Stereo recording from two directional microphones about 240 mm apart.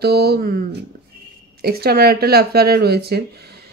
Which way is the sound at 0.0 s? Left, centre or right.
Right.